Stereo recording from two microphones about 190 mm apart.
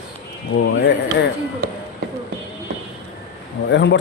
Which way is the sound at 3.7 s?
70° left (ahead or behind).